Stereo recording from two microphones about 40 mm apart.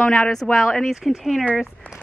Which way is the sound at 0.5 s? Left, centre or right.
Centre.